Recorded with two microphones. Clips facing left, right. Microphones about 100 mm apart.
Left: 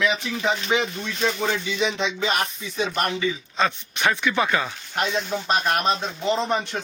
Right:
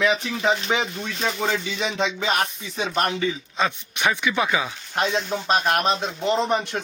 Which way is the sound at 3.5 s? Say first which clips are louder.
Left 1 dB; 10° right (ahead or behind).